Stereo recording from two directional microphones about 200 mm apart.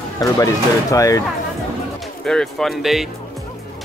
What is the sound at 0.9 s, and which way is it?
Speech, 15° left (ahead or behind).